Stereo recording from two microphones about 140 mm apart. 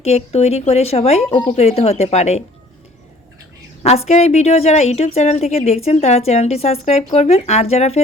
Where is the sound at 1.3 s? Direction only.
35° left (ahead or behind).